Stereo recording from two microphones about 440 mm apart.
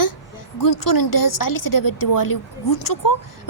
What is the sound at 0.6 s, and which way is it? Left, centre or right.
Speech, left.